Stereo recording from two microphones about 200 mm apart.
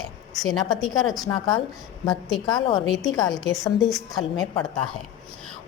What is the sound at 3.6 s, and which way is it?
Speech, centre (ahead or behind).